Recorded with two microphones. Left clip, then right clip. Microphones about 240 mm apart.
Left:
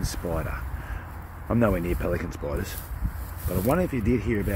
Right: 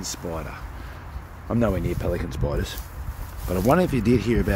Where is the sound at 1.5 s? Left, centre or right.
Centre.